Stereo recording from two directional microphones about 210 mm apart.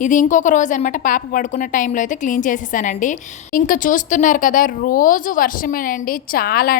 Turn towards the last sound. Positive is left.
turn(degrees=45)  # may be behind; listen again after turning